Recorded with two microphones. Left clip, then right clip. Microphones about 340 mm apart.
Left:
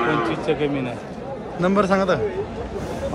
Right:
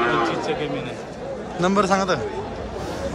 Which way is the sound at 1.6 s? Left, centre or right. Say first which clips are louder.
Left 1 dB; centre.